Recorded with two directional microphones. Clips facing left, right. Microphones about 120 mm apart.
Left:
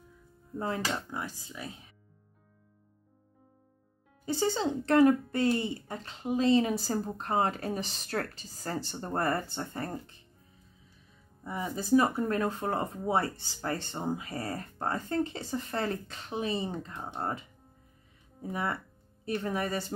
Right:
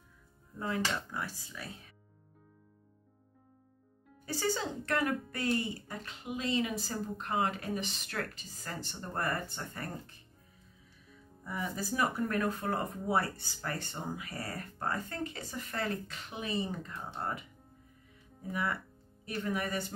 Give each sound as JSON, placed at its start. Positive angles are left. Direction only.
{"t": 0.6, "sound": "a woman's voice", "side_deg": 30}
{"t": 1.1, "sound": "speech", "side_deg": 20}
{"t": 4.3, "sound": "a woman's voice", "side_deg": 20}
{"t": 11.4, "sound": "speech", "side_deg": 25}